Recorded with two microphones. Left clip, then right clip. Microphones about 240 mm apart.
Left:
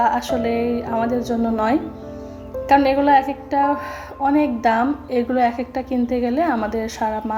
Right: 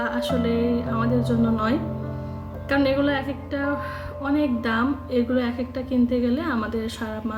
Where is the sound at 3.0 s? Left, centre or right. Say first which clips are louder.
Left 10 dB; centre.